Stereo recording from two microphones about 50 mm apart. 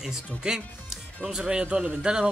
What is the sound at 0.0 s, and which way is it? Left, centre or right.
Speech, centre.